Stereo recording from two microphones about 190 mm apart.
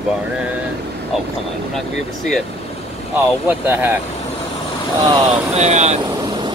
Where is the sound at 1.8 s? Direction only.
Centre (ahead or behind).